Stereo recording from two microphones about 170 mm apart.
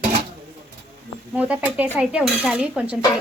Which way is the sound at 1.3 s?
10° right (ahead or behind).